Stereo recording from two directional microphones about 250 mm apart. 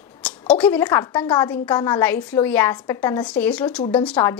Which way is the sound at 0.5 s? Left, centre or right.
Centre.